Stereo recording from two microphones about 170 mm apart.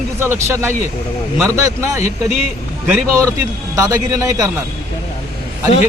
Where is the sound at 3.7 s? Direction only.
20° right (ahead or behind).